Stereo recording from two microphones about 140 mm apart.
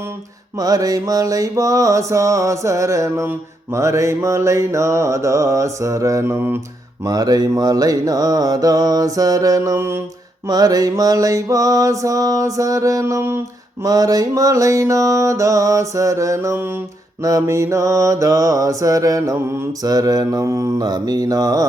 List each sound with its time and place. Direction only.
0.6 s mantra: 25° right (ahead or behind)
7.0 s mantra: 25° right (ahead or behind)